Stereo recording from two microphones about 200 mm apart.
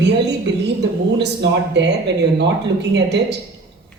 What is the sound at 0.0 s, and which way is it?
A woman's voice, 60° right (ahead or behind).